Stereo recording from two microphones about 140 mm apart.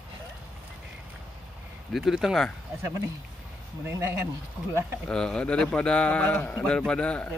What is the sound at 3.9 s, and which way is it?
Speech, 15° right (ahead or behind).